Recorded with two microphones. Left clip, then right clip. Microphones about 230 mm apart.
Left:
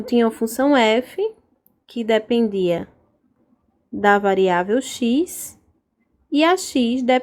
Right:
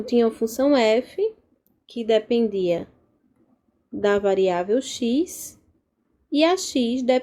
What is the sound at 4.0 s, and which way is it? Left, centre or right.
Speech, left.